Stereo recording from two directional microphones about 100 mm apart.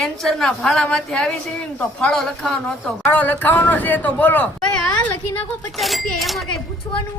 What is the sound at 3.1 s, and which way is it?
Speech, 20° left (ahead or behind).